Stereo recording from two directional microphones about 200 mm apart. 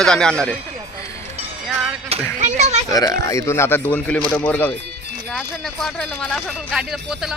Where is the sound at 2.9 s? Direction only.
20° left (ahead or behind); by 7.4 s 5° right (ahead or behind).